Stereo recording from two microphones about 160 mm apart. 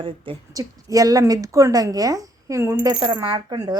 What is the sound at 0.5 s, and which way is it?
A woman's voice, 20° right (ahead or behind).